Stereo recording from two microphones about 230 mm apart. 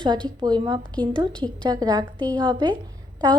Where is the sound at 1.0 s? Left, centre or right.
Centre.